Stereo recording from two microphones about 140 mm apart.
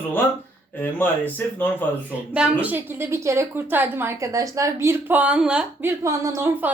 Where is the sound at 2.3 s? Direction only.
10° right (ahead or behind).